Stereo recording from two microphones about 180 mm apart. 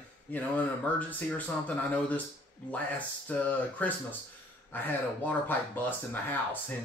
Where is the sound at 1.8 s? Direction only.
10° left (ahead or behind).